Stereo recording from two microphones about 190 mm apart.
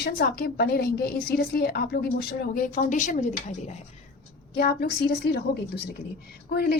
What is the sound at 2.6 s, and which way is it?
Speech, 45° left (ahead or behind).